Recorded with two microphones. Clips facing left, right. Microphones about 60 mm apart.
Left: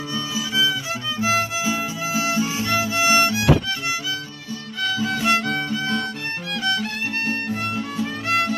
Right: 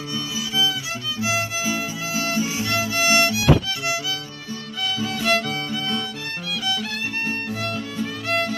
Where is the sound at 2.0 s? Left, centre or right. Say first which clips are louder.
Left 4 dB; centre.